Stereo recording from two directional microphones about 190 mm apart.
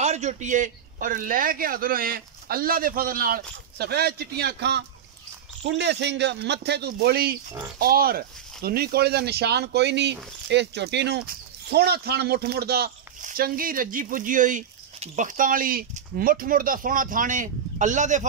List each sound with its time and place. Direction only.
0.0 s speech: 35° right (ahead or behind)